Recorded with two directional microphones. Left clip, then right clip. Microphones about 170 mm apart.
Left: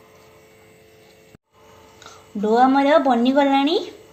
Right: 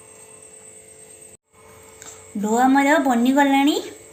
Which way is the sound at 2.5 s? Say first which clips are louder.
Left 2 dB; 30° left (ahead or behind).